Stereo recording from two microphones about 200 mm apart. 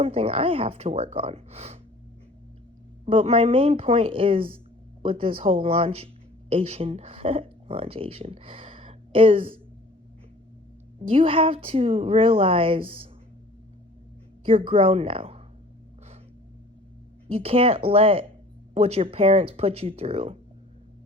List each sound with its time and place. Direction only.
0.0 s a woman's voice: 30° right (ahead or behind)
3.1 s a woman's voice: 25° right (ahead or behind)
11.0 s a woman's voice: 30° right (ahead or behind)
14.4 s a woman's voice: 25° right (ahead or behind)
17.2 s a woman's voice: 30° right (ahead or behind)